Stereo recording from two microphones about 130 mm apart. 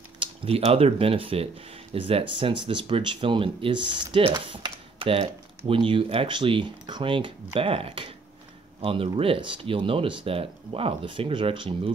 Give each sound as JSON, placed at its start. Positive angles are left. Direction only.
{"t": 0.2, "sound": "cutlery", "side_deg": -45}
{"t": 0.6, "sound": "speech", "side_deg": -50}